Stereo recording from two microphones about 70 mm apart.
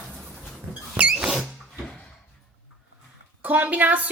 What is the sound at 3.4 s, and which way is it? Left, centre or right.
Speech, right.